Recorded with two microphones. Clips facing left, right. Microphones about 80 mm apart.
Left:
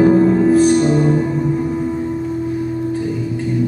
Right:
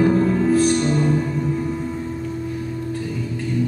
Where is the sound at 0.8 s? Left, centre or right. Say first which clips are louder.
Left 5 dB; centre.